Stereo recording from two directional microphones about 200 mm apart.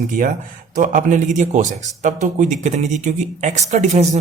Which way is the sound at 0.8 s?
40° right (ahead or behind).